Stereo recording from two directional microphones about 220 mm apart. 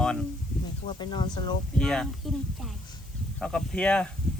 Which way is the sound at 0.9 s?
20° left (ahead or behind).